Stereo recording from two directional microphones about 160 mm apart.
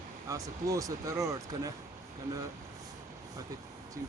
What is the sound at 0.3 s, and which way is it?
Speech, 20° right (ahead or behind).